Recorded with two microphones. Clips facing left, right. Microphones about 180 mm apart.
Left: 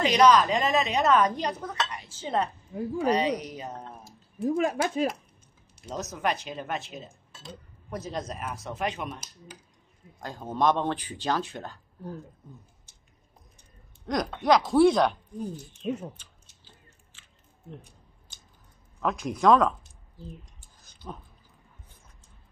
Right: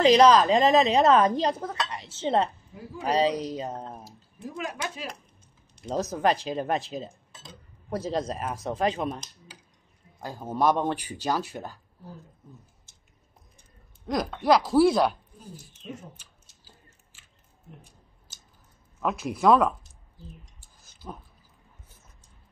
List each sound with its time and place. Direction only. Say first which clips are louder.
0.0 s speech: right 3 dB; 30° right (ahead or behind)
4.5 s speech: left 8 dB; 50° left (ahead or behind)
5.9 s speech: right 5 dB; 30° right (ahead or behind)
10.2 s speech: right 1 dB; 10° right (ahead or behind)
14.0 s speech: right 1 dB; 5° right (ahead or behind)
16.2 s a sound: left 1 dB; 10° right (ahead or behind)
18.9 s speech: even; 5° right (ahead or behind)
20.8 s a sound: even; 5° right (ahead or behind)